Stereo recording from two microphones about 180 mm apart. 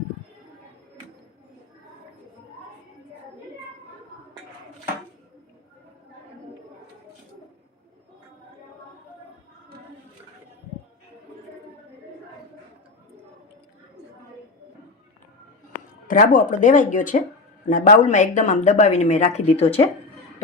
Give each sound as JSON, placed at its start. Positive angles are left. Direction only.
{"t": 16.0, "sound": "speech", "side_deg": 50}